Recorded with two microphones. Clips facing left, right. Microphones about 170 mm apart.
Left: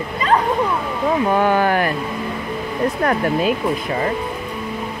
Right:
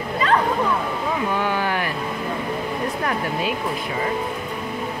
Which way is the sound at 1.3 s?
50° left (ahead or behind).